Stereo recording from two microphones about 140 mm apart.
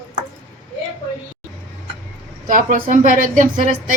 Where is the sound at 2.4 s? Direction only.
80° right.